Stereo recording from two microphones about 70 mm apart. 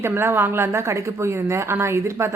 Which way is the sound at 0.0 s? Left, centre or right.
Right.